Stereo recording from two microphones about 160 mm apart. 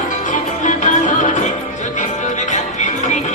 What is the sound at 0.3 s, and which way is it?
Music, 50° left (ahead or behind).